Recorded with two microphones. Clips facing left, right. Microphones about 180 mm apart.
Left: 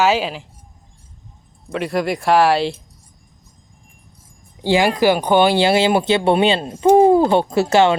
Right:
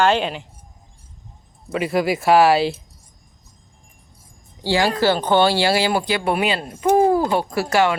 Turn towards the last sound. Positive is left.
turn(degrees=25)  # may be behind; listen again after turning